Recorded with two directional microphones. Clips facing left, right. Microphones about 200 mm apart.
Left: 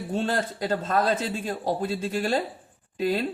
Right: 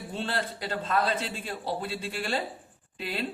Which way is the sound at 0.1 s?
45° left (ahead or behind).